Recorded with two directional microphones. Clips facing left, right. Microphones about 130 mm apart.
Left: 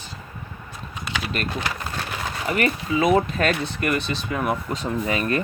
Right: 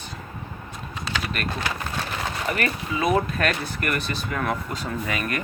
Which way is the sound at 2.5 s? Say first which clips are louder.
Left 6 dB; 20° left (ahead or behind).